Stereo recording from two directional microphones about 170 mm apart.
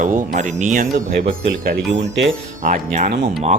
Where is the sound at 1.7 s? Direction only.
90° right.